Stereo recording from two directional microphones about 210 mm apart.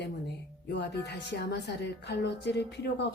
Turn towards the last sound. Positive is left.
turn(degrees=55)  # may be behind; listen again after turning